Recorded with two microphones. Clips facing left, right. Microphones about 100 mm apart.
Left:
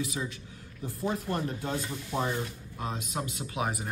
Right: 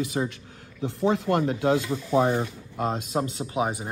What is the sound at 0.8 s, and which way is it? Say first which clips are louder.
Speech: right 8 dB; 80° right.